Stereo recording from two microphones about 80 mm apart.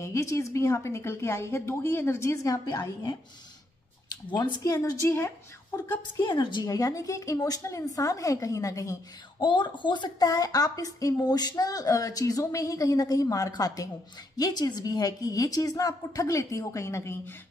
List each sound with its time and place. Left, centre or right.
0.0 s a woman's voice: left
5.0 s a woman's voice: left
6.3 s a woman's voice: left
6.7 s speech: left
9.4 s speech: left